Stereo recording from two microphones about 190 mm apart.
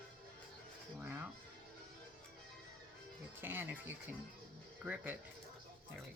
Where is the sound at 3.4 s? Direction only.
10° right (ahead or behind).